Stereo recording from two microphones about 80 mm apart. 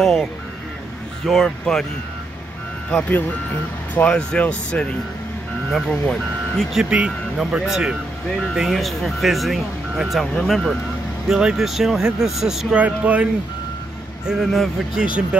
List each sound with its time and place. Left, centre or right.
0.0 s speech: centre
2.9 s speech: centre
5.7 s speech: centre
6.8 s speech: centre
12.7 s speech: centre
14.2 s speech: centre